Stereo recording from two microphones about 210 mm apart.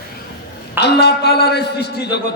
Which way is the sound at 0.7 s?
50° left (ahead or behind).